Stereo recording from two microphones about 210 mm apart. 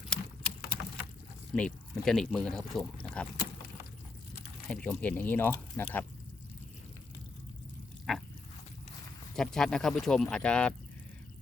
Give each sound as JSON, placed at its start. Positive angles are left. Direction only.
{"t": 0.1, "sound": "patter", "side_deg": 5}
{"t": 1.5, "sound": "speech", "side_deg": 5}
{"t": 4.7, "sound": "speech", "side_deg": 5}
{"t": 8.1, "sound": "a sound", "side_deg": 0}
{"t": 9.3, "sound": "speech", "side_deg": 0}